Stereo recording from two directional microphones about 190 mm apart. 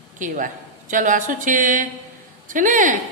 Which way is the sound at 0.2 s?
40° right (ahead or behind).